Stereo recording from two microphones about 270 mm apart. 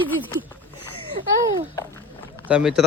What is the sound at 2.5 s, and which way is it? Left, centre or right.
Speech, centre.